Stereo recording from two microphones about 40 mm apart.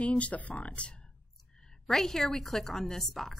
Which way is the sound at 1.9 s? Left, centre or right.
Centre.